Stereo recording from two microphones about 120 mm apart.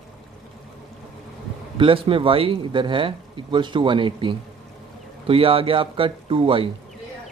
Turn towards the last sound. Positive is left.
turn(degrees=-50)  # may be behind; listen again after turning